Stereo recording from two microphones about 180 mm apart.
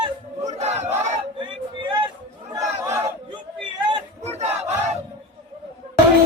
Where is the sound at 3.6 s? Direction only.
25° right (ahead or behind).